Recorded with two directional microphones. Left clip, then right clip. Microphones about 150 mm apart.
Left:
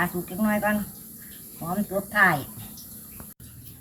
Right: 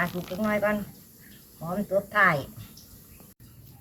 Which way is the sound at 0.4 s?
25° right (ahead or behind).